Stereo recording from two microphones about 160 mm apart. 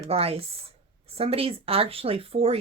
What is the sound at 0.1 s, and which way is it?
Speech, 35° right (ahead or behind).